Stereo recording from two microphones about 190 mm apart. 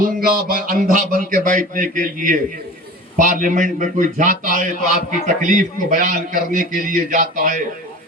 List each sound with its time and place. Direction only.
0.0 s a man's voice: 50° right (ahead or behind)